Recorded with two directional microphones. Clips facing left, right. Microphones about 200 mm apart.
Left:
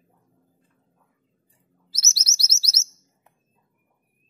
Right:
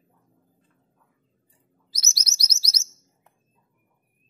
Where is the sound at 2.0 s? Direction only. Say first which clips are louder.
Even; 15° right (ahead or behind).